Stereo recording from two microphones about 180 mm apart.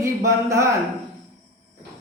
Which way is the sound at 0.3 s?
15° right (ahead or behind).